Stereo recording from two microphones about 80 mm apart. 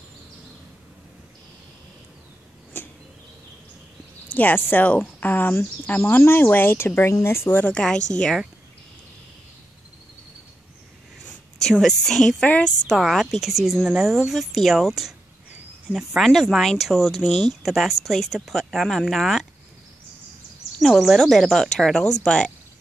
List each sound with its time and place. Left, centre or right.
2.8 s a sound: left
4.3 s speech: left
7.7 s a woman's voice: centre
11.8 s a woman's voice: centre
12.9 s speech: centre
20.8 s speech: centre